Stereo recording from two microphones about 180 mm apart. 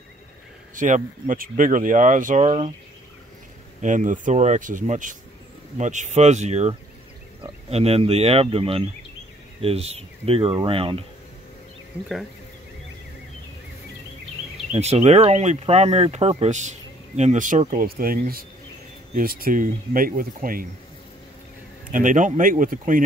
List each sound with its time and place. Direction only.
0.7 s speech: 45° right (ahead or behind)
3.8 s speech: 45° right (ahead or behind)
7.7 s speech: 35° right (ahead or behind)
14.7 s speech: 35° right (ahead or behind)
17.8 s speech: 55° right (ahead or behind)
21.9 s speech: 45° right (ahead or behind)